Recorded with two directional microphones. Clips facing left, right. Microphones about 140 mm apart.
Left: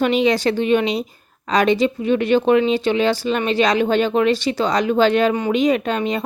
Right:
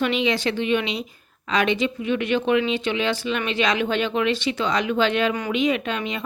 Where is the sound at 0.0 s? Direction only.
40° left (ahead or behind).